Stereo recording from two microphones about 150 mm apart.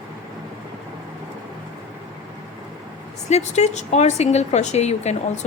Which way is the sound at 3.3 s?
50° left (ahead or behind).